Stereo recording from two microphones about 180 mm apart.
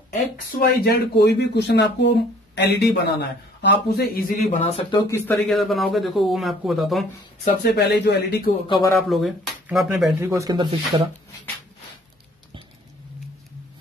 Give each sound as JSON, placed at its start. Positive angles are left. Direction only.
{"t": 0.1, "sound": "speech", "side_deg": 55}
{"t": 4.5, "sound": "speech", "side_deg": 35}
{"t": 5.1, "sound": "a man's voice", "side_deg": 10}
{"t": 7.7, "sound": "speech", "side_deg": 65}
{"t": 8.6, "sound": "speech", "side_deg": 25}
{"t": 9.1, "sound": "a man's voice", "side_deg": 0}
{"t": 10.2, "sound": "speech", "side_deg": -15}